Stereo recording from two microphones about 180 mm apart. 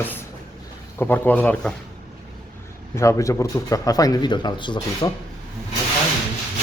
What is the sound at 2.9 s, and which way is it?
Speech, 15° left (ahead or behind).